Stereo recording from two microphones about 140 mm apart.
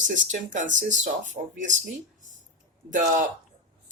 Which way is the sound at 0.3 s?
65° right (ahead or behind).